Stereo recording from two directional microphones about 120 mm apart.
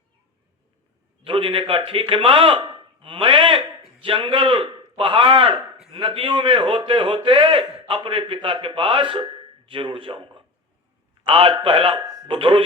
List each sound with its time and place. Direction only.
1.2 s a man's voice: 45° right (ahead or behind)
12.0 s a sound: 35° right (ahead or behind)
12.3 s a man's voice: 45° right (ahead or behind)